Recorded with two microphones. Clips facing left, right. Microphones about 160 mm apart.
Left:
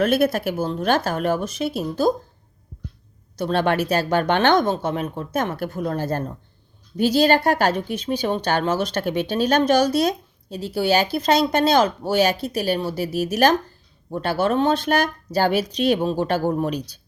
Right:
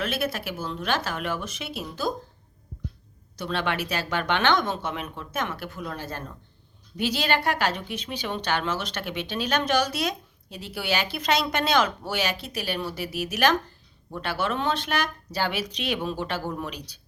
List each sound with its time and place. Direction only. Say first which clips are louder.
0.0 s speech: left 10 dB; 50° left (ahead or behind)
3.3 s a woman's voice: left 8 dB; 45° left (ahead or behind)